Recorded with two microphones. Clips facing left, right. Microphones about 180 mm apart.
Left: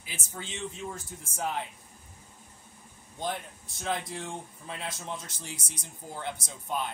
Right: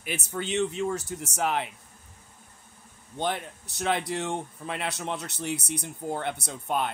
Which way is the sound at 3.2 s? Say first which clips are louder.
Right 5 dB; 75° right (ahead or behind).